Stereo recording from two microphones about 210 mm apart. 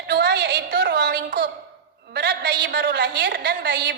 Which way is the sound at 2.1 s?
55° right (ahead or behind).